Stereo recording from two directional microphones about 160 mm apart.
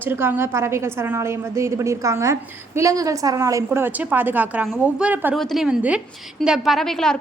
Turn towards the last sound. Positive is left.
turn(degrees=5)  # may be behind; listen again after turning